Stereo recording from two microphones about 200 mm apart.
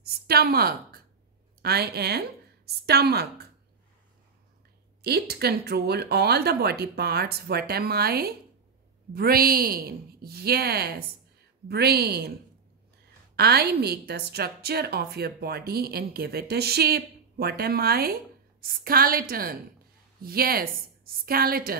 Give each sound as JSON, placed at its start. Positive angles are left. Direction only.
{"t": 0.0, "sound": "a woman's voice", "side_deg": -50}
{"t": 5.0, "sound": "a woman's voice", "side_deg": -55}
{"t": 13.4, "sound": "a woman's voice", "side_deg": -50}